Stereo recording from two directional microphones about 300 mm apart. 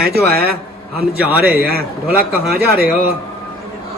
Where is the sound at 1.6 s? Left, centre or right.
Right.